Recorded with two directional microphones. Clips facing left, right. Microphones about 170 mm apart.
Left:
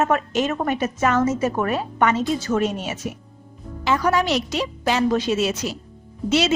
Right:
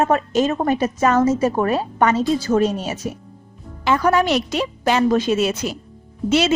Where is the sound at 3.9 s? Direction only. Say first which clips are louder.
Right 3 dB; 55° right (ahead or behind).